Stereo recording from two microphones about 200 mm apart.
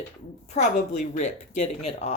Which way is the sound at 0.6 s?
30° left (ahead or behind).